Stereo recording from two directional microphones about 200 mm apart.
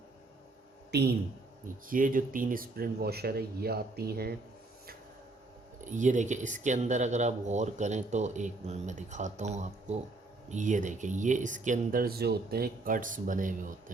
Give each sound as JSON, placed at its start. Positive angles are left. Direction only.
{"t": 0.9, "sound": "speech", "side_deg": -55}
{"t": 1.9, "sound": "speech", "side_deg": -45}
{"t": 5.8, "sound": "speech", "side_deg": -40}